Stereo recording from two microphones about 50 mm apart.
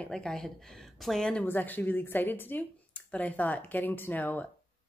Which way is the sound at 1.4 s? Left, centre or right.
Left.